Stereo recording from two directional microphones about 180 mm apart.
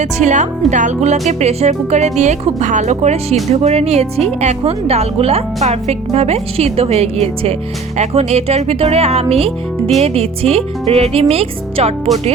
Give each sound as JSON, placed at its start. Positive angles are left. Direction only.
{"t": 0.0, "sound": "a woman's voice", "side_deg": -40}